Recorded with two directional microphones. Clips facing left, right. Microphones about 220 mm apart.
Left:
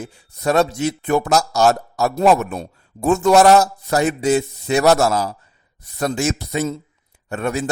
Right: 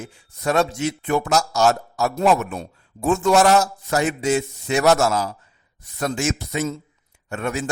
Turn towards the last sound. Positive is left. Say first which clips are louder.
# left 3 dB
turn(degrees=35)  # may be behind; listen again after turning